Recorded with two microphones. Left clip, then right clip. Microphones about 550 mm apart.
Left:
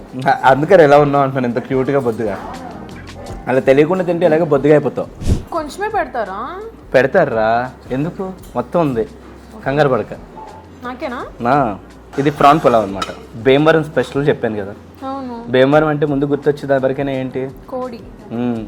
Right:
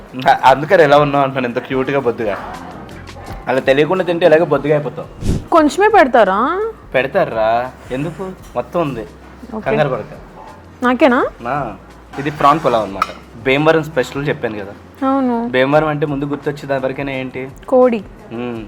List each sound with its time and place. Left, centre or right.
0.2 s a man's voice: centre
3.4 s a man's voice: centre
5.5 s a woman's voice: right
6.9 s a man's voice: left
10.8 s speech: right
11.4 s speech: left
12.2 s a man's voice: centre
15.0 s a woman's voice: right
15.5 s a man's voice: centre
17.7 s a woman's voice: right
18.3 s a man's voice: centre